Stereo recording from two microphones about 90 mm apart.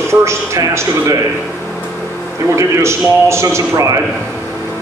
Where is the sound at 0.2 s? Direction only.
30° right (ahead or behind).